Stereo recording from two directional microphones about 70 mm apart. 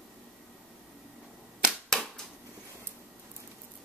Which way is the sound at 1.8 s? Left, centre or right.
Centre.